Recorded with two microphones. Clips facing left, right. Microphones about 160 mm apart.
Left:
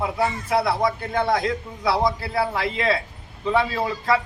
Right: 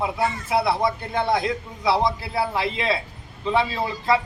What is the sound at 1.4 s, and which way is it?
A man's voice, 20° right (ahead or behind).